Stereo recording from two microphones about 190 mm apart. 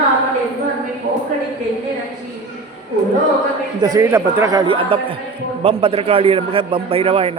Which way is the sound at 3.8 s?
20° right (ahead or behind).